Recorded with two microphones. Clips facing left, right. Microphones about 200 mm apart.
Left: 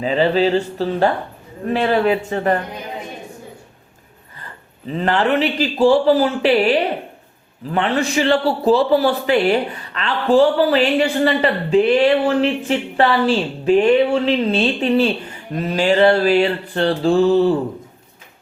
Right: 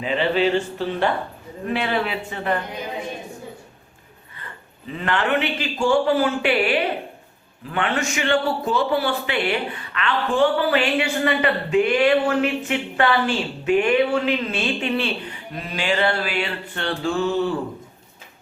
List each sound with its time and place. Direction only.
0.0 s a man's voice: 35° left (ahead or behind)
4.9 s a man's voice: 35° left (ahead or behind)